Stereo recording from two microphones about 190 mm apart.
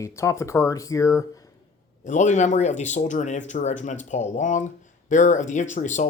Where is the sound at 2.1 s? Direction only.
40° left (ahead or behind).